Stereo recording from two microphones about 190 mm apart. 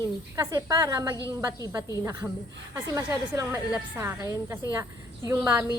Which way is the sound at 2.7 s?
15° right (ahead or behind).